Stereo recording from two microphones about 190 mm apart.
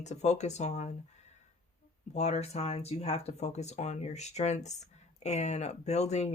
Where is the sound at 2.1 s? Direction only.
35° left (ahead or behind).